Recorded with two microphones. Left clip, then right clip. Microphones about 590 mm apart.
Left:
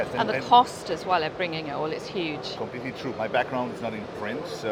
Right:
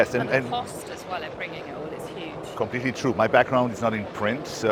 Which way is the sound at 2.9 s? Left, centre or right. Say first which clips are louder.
Right 8 dB; right.